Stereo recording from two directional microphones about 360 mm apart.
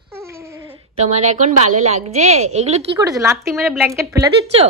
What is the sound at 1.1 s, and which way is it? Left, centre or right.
A woman's voice, centre.